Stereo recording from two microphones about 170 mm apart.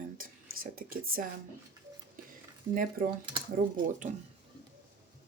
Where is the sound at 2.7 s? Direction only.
55° right (ahead or behind).